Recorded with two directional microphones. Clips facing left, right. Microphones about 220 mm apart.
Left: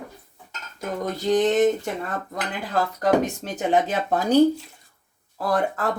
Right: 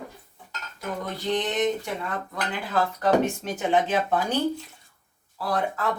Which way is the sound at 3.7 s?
40° left (ahead or behind).